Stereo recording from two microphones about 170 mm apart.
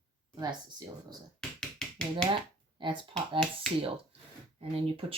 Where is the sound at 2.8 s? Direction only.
30° right (ahead or behind).